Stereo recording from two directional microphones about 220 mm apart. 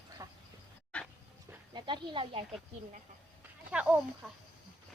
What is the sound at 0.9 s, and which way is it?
Dog, 5° left (ahead or behind).